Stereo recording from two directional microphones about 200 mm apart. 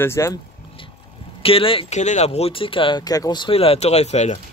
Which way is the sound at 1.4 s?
25° left (ahead or behind).